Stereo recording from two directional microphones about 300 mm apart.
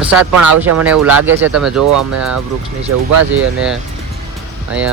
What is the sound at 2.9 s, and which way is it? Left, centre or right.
Speech, right.